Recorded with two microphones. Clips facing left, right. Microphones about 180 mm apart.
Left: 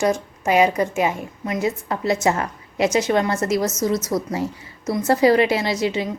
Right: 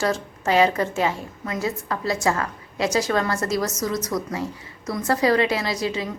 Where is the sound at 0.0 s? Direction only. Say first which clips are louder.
Left 3 dB; 15° left (ahead or behind).